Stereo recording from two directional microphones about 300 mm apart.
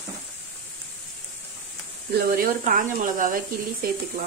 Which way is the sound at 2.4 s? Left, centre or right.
Right.